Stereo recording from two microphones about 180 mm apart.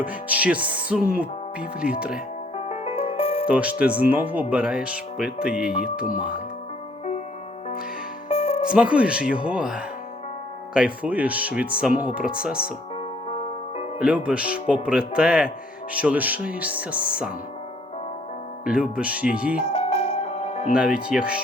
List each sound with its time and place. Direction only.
0.0 s speech: 10° right (ahead or behind)
2.6 s music: 35° left (ahead or behind)
3.4 s speech: 5° right (ahead or behind)
8.3 s music: 35° left (ahead or behind)
8.7 s speech: 5° right (ahead or behind)
14.0 s speech: 5° right (ahead or behind)
18.6 s speech: 5° right (ahead or behind)
19.6 s music: 35° left (ahead or behind)
20.7 s speech: 5° right (ahead or behind)